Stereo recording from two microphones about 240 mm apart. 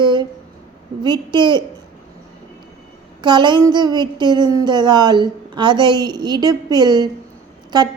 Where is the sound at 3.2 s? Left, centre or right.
Centre.